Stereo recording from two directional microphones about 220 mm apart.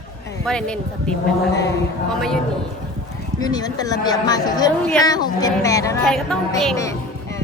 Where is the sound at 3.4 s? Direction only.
15° left (ahead or behind).